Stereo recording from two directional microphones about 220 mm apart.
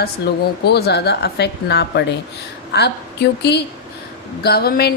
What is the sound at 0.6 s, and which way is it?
A woman's voice, 50° left (ahead or behind).